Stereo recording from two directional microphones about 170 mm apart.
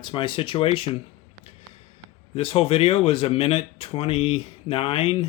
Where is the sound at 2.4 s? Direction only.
35° left (ahead or behind).